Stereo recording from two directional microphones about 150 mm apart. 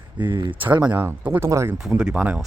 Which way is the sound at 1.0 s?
10° right (ahead or behind).